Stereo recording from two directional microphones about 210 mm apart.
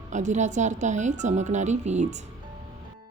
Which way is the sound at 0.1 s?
35° right (ahead or behind).